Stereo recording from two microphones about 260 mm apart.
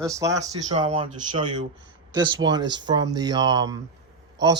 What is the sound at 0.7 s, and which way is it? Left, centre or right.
Speech, right.